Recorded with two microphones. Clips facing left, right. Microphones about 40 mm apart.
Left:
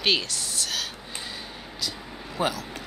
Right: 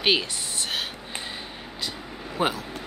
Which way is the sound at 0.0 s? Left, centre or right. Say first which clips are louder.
Right 2 dB; right.